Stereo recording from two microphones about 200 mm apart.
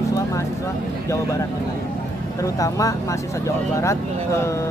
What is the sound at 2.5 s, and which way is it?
Speech, 15° left (ahead or behind).